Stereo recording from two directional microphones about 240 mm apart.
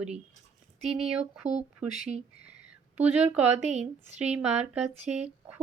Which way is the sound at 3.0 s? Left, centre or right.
Centre.